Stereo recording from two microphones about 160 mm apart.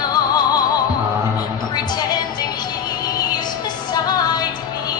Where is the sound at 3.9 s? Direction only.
25° left (ahead or behind).